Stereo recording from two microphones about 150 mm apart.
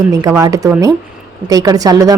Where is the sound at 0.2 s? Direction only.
20° right (ahead or behind).